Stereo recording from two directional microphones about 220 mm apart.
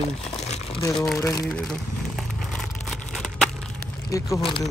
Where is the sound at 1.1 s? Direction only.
15° left (ahead or behind).